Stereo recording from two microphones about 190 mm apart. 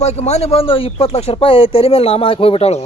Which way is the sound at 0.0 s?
35° left (ahead or behind).